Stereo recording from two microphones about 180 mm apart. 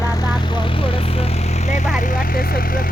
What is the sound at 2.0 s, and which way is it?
Vehicle, 50° left (ahead or behind).